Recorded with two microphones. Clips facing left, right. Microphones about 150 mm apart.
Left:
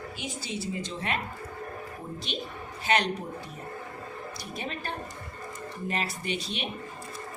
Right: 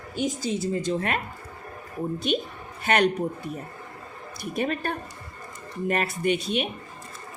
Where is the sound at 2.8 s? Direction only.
55° right (ahead or behind).